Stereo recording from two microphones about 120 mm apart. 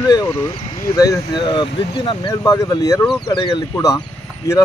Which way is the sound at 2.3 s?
30° left (ahead or behind).